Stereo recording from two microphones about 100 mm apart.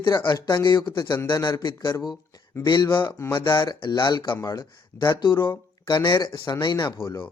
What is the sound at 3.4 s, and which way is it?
Speech, 50° left (ahead or behind).